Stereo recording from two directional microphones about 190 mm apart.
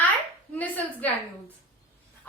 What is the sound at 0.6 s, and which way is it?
Speech, 10° left (ahead or behind).